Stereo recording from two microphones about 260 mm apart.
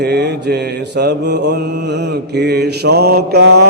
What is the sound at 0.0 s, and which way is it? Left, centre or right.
Mantra, right.